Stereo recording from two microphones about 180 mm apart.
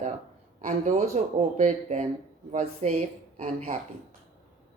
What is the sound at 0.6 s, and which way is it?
A woman's voice, 40° right (ahead or behind).